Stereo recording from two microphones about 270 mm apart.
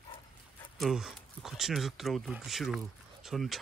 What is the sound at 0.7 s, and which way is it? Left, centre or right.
Speech, centre.